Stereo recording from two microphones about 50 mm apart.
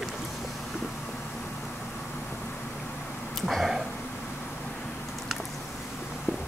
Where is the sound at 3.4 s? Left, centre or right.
Centre.